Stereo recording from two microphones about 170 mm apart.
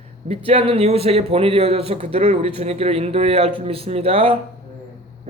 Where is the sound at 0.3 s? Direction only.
35° right (ahead or behind).